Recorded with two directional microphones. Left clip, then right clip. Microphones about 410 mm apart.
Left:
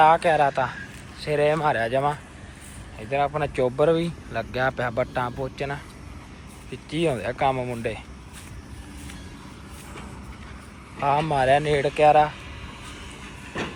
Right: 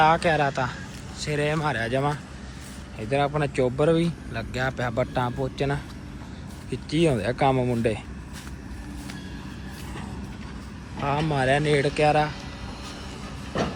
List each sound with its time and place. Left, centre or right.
0.0 s speech: centre
11.0 s speech: centre
13.5 s train: right